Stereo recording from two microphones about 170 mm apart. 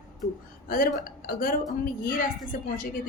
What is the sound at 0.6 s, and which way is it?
A woman's voice, 55° left (ahead or behind).